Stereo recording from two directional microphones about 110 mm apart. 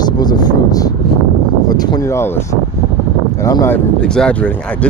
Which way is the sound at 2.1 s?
25° left (ahead or behind).